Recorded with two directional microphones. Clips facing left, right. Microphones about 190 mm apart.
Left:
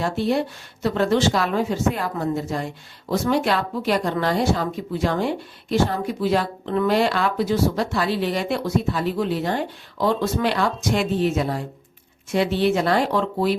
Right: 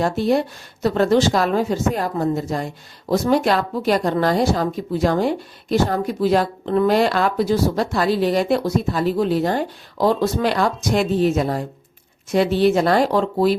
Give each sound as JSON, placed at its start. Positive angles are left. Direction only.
{"t": 0.8, "sound": "speech", "side_deg": -40}